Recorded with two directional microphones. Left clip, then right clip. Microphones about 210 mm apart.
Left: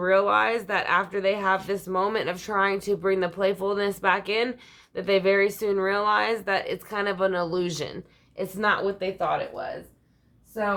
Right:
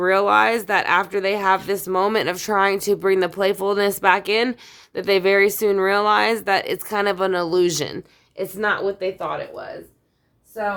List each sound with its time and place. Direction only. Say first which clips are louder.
0.0 s speech: right 5 dB; 50° right (ahead or behind)
8.5 s speech: right 2 dB; 35° right (ahead or behind)